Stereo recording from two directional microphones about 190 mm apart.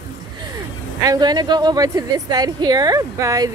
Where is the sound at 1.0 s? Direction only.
20° right (ahead or behind).